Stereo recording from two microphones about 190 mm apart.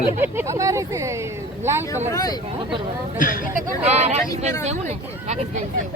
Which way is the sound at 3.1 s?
45° left (ahead or behind).